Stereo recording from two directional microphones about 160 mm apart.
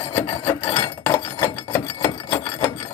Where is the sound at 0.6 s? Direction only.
25° left (ahead or behind).